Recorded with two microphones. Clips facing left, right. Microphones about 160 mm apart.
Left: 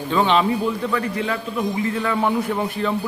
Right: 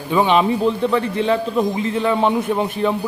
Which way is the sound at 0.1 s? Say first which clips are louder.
Right 3 dB; 15° right (ahead or behind).